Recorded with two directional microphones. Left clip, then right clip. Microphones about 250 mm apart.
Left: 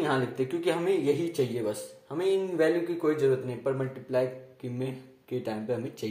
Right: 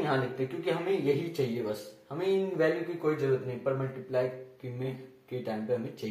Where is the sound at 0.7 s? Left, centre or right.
Left.